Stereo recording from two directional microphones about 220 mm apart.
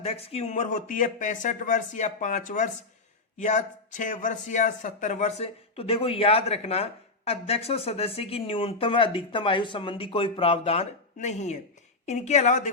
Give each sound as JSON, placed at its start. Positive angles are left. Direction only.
{"t": 0.0, "sound": "speech", "side_deg": 25}